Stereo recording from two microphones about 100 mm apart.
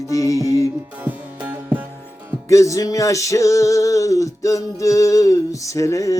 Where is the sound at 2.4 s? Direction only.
30° left (ahead or behind).